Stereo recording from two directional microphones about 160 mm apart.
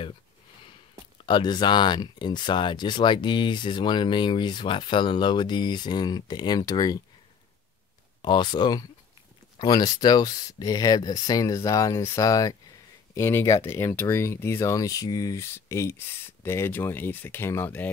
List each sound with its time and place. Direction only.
1.2 s speech: 30° left (ahead or behind)
8.2 s speech: 30° left (ahead or behind)